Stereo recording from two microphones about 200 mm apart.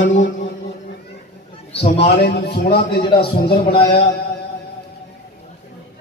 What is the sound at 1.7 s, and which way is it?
Speech, 30° left (ahead or behind).